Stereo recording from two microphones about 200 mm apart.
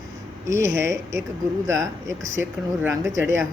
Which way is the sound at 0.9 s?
15° right (ahead or behind).